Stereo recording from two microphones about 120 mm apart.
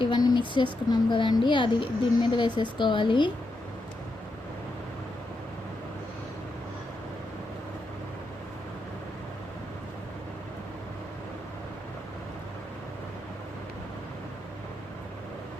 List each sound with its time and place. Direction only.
0.0 s a woman's voice: 35° left (ahead or behind)